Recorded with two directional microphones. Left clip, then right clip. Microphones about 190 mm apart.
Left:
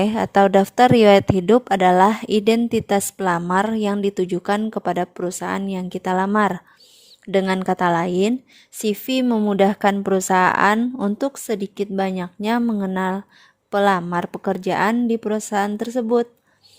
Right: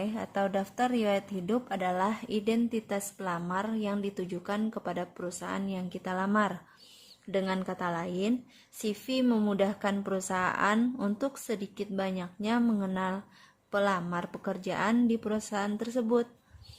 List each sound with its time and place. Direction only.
0.0 s a woman's voice: 50° left (ahead or behind)